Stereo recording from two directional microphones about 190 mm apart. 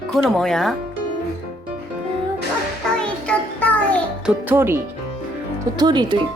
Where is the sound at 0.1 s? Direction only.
Centre (ahead or behind).